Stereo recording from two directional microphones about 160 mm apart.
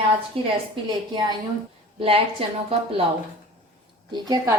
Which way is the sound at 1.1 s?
25° right (ahead or behind).